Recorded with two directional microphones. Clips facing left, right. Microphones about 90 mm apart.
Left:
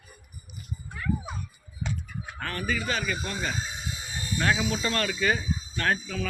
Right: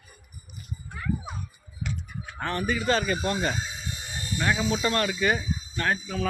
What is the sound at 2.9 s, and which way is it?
Speech, 35° right (ahead or behind).